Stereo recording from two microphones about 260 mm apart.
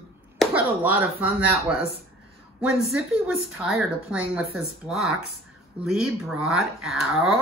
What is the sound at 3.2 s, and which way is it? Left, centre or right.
Speech, centre.